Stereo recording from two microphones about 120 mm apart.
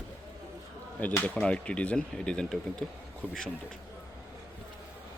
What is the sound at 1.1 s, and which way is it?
Speech, 15° left (ahead or behind).